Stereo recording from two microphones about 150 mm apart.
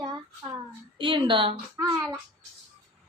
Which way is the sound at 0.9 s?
35° right (ahead or behind).